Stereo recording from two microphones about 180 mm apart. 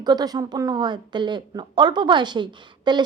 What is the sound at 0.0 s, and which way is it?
A woman's voice, 20° right (ahead or behind).